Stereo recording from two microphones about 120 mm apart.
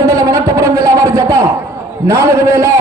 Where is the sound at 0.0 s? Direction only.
25° right (ahead or behind).